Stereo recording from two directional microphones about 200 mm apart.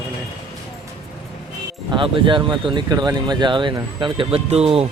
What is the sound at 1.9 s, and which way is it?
Speech, 25° right (ahead or behind).